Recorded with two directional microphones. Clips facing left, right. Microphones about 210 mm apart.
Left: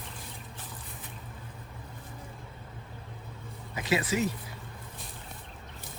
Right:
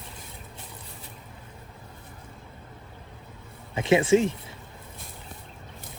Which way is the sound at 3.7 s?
25° right (ahead or behind).